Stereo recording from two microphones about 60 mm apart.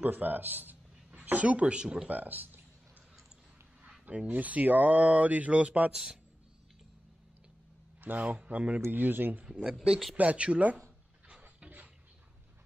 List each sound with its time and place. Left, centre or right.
0.0 s a man's voice: right
2.0 s speech: right
4.0 s speech: right
8.0 s speech: right
8.8 s speech: right
9.5 s speech: centre
11.4 s a sound: right